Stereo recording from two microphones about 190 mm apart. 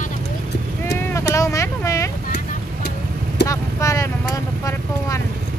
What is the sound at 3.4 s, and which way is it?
Speech, 15° left (ahead or behind).